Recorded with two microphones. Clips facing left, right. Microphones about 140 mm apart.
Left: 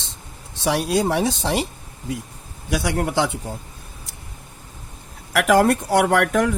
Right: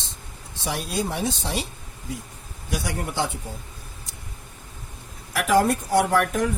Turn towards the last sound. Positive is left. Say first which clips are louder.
# left 3 dB
turn(degrees=90)